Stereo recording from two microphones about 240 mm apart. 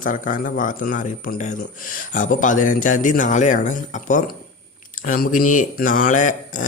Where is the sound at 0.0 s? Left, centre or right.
Left.